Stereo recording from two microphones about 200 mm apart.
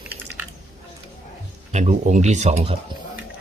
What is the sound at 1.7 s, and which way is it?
Speech, 35° right (ahead or behind).